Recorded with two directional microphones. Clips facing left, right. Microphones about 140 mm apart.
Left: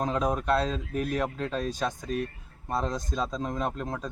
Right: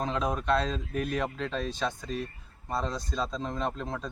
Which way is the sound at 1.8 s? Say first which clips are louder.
Left 1 dB; 15° left (ahead or behind).